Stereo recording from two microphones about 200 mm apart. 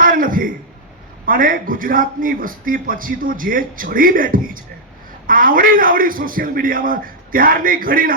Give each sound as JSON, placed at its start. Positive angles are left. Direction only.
{"t": 0.0, "sound": "throat clearing", "side_deg": -45}
{"t": 1.2, "sound": "a man's voice", "side_deg": -45}